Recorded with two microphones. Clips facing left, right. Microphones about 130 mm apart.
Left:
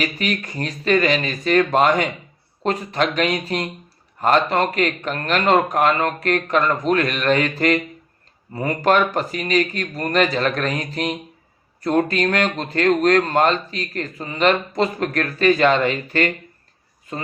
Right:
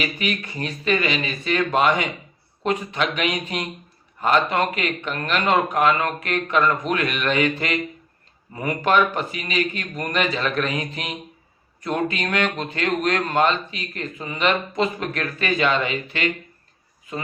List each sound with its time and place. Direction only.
0.0 s speech: 40° left (ahead or behind)